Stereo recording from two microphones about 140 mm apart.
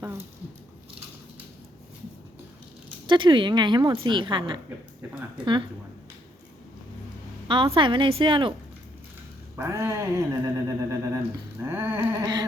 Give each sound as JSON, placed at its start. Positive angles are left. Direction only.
{"t": 3.1, "sound": "a woman's voice", "side_deg": -35}
{"t": 7.4, "sound": "a sound", "side_deg": -35}
{"t": 7.8, "sound": "a woman's voice", "side_deg": -35}
{"t": 9.6, "sound": "speech", "side_deg": -20}
{"t": 11.6, "sound": "a sound", "side_deg": -15}
{"t": 12.2, "sound": "a woman's voice", "side_deg": -30}